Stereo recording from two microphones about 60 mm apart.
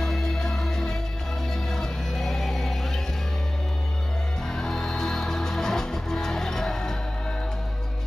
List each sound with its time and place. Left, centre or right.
0.0 s music: centre
4.5 s music: centre